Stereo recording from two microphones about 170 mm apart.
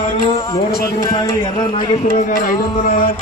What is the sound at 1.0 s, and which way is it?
Speech, 25° left (ahead or behind).